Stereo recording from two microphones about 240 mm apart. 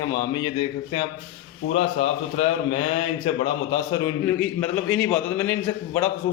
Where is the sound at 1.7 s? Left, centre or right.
Left.